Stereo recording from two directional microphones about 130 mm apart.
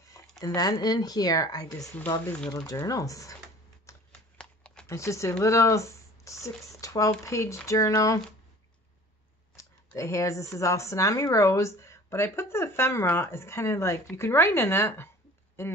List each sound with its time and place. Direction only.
0.2 s a sound: 25° left (ahead or behind)
0.6 s speech: 30° left (ahead or behind)
2.3 s speech: 5° left (ahead or behind)
2.6 s speech: 25° left (ahead or behind)
3.9 s shuffling cards: 25° left (ahead or behind)
4.4 s a sound: 5° left (ahead or behind)
4.8 s speech: 25° left (ahead or behind)
9.9 s speech: 25° left (ahead or behind)